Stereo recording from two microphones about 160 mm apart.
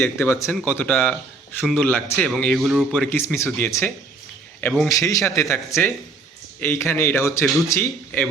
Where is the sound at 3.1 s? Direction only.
15° left (ahead or behind).